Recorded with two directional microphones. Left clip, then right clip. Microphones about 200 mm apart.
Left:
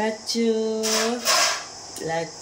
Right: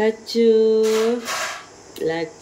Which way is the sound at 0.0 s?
Centre (ahead or behind).